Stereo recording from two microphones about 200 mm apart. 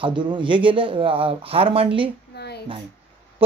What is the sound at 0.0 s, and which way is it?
Speech, 25° right (ahead or behind).